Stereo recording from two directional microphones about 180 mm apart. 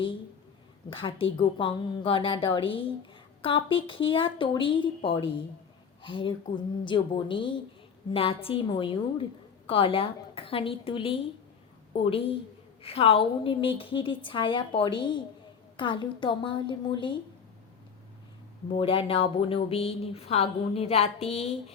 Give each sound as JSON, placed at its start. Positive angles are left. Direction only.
{"t": 0.9, "sound": "a woman's voice", "side_deg": 30}
{"t": 18.7, "sound": "a woman's voice", "side_deg": 30}